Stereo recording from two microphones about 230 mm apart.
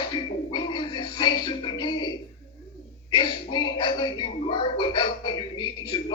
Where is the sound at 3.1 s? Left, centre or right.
Left.